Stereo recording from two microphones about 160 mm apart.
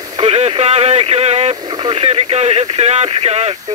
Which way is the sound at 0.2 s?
40° right (ahead or behind).